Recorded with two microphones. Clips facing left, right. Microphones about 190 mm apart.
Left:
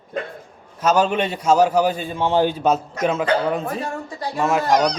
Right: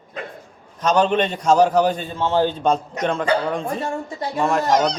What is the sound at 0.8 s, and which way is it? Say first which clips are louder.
A man's voice: even; 5° left (ahead or behind).